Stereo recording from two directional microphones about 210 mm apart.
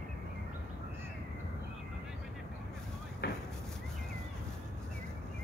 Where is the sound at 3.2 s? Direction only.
50° left (ahead or behind).